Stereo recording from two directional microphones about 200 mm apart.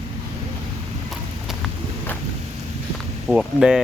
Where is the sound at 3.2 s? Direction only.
Centre (ahead or behind).